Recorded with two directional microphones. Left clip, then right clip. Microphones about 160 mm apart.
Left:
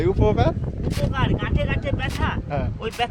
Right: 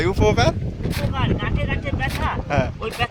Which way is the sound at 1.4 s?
65° left (ahead or behind).